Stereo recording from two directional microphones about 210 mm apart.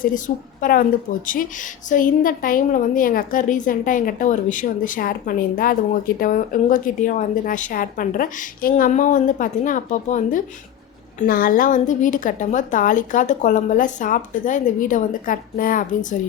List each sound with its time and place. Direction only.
0.3 s a woman's voice: 45° left (ahead or behind)